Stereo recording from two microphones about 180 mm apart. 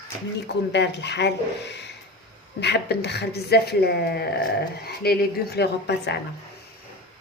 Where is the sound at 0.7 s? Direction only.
70° left (ahead or behind).